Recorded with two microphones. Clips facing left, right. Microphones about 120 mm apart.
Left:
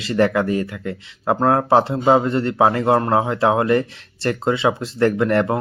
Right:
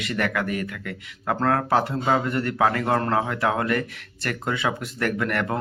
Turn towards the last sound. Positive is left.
turn(degrees=25)  # may be behind; listen again after turning